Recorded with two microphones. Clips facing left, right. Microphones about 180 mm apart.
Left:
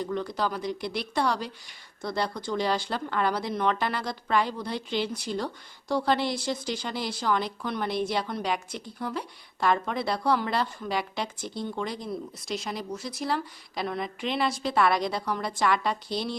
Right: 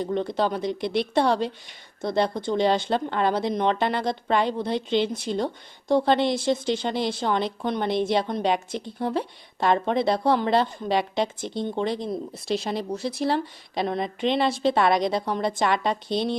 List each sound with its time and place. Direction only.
0.0 s speech: 25° right (ahead or behind)